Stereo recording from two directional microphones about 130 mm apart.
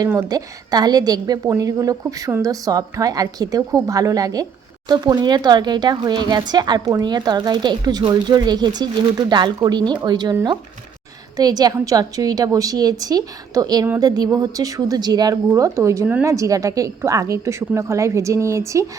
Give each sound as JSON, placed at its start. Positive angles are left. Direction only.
{"t": 0.2, "sound": "a woman's voice", "side_deg": -30}
{"t": 11.3, "sound": "a woman's voice", "side_deg": -30}